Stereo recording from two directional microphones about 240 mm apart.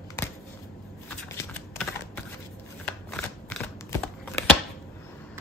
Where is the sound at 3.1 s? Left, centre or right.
Centre.